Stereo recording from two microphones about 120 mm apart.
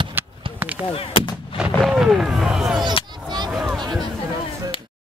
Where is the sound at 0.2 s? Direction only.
15° right (ahead or behind).